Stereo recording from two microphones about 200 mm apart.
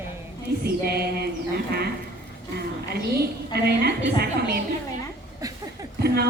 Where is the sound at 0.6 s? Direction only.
50° right (ahead or behind).